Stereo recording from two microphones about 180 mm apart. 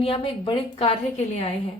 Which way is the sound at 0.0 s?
30° left (ahead or behind).